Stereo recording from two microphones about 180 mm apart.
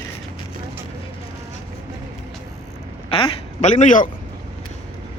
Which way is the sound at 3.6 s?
45° left (ahead or behind).